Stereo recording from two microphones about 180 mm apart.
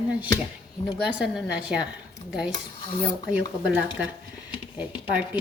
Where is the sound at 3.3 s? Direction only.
10° right (ahead or behind).